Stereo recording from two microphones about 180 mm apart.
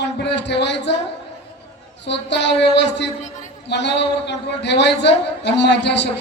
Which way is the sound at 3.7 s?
75° left (ahead or behind).